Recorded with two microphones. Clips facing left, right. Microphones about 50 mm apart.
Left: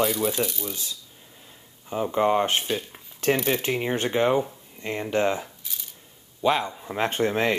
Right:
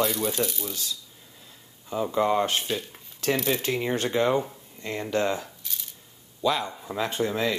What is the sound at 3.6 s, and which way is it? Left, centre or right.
Speech, left.